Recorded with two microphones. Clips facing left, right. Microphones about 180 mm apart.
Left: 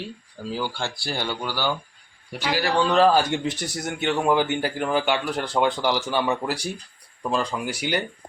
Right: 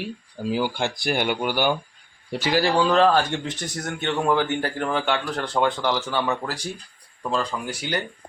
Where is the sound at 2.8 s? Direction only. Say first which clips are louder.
Left 2 dB; centre (ahead or behind).